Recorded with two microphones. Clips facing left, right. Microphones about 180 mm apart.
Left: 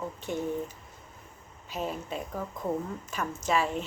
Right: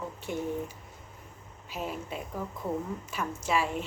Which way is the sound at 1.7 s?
10° right (ahead or behind).